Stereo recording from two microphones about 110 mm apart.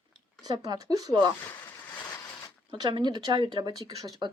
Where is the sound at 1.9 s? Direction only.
35° left (ahead or behind).